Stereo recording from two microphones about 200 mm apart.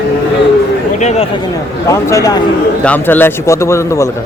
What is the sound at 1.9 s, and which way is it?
Speech, 15° left (ahead or behind).